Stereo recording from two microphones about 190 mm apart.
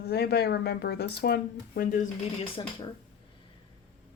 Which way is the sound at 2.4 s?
25° left (ahead or behind).